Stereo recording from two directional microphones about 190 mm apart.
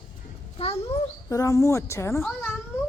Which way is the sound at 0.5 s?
30° left (ahead or behind).